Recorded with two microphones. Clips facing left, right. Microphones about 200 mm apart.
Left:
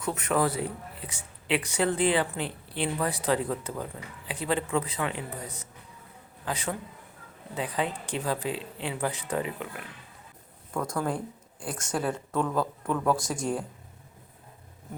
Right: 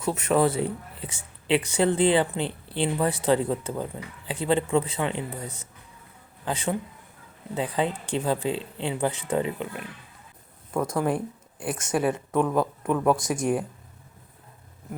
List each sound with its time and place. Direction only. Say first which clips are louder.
0.0 s a man's voice: right 4 dB; 25° right (ahead or behind)